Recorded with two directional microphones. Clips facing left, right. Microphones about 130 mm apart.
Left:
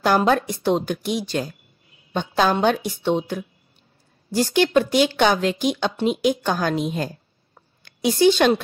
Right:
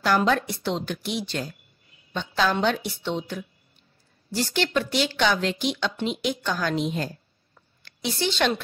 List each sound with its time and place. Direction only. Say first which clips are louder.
0.0 s speech: left 4 dB; 45° left (ahead or behind)
8.1 s speech: left 9 dB; 45° left (ahead or behind)